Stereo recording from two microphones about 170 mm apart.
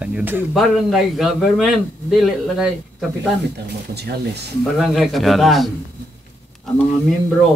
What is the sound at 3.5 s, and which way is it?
Speech, 75° right (ahead or behind).